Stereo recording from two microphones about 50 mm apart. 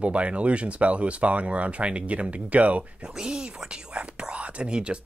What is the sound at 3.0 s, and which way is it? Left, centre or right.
Speech, centre.